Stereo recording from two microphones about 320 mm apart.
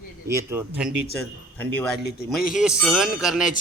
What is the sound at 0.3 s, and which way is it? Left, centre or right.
A man's voice, centre.